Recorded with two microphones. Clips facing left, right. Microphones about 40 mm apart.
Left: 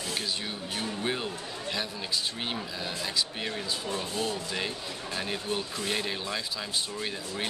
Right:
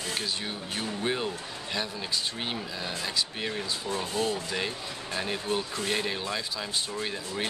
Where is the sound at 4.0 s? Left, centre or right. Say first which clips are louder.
Right 5 dB; right.